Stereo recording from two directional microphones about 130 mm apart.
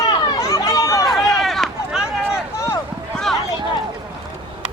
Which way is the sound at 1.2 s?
Centre (ahead or behind).